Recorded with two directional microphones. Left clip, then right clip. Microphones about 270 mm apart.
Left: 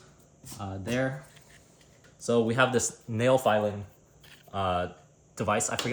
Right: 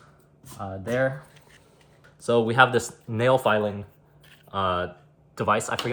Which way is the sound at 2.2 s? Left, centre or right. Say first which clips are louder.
Right 6 dB; centre.